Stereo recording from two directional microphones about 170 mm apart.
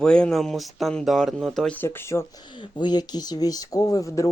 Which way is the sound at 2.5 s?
25° left (ahead or behind).